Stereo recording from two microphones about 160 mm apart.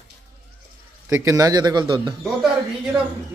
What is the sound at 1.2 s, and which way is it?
Speech, 20° right (ahead or behind).